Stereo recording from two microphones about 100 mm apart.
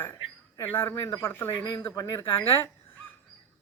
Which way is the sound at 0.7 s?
25° left (ahead or behind).